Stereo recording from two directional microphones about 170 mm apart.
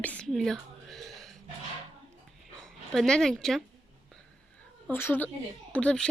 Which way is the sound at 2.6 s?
5° left (ahead or behind).